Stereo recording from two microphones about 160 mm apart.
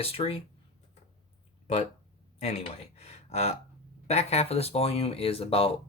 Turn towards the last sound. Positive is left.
turn(degrees=35)  # may be behind; listen again after turning